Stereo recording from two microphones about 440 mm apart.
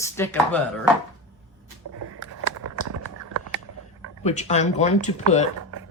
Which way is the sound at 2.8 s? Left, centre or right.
Right.